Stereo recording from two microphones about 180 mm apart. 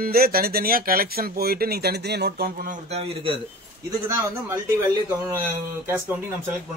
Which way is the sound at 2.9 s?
30° right (ahead or behind).